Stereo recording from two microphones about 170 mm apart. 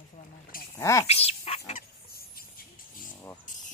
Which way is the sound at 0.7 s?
15° left (ahead or behind).